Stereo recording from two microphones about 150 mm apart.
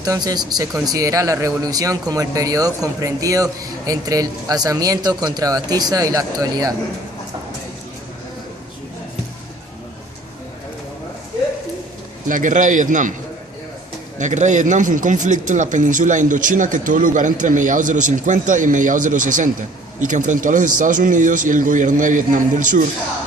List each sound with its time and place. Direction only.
0.0 s speech: 25° right (ahead or behind)
12.3 s speech: 60° right (ahead or behind)
14.2 s speech: 55° right (ahead or behind)